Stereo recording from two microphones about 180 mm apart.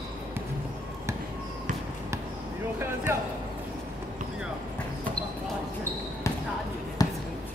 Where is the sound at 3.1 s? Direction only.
15° right (ahead or behind).